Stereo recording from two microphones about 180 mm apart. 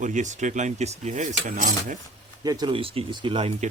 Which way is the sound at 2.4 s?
25° right (ahead or behind).